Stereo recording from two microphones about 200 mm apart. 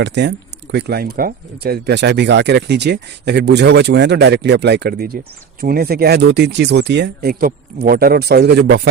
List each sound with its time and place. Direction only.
0.0 s speech: 60° right (ahead or behind)